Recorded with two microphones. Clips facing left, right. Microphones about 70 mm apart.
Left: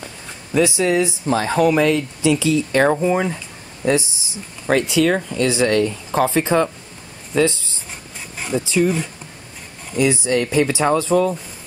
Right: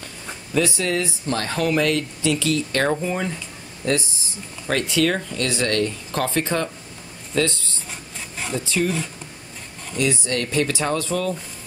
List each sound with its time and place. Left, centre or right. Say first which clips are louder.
0.0 s speech: left 1 dB; centre